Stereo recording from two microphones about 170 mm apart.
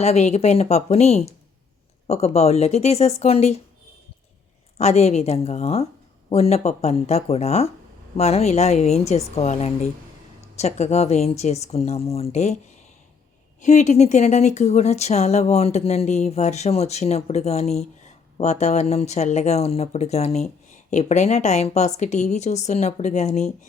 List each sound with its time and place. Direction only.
0.0 s speech: 40° left (ahead or behind)
4.8 s speech: 40° left (ahead or behind)
13.6 s speech: 45° left (ahead or behind)